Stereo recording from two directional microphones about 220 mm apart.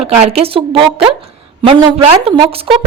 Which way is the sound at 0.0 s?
30° right (ahead or behind).